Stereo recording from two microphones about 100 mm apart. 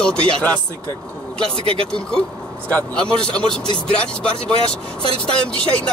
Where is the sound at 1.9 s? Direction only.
10° left (ahead or behind).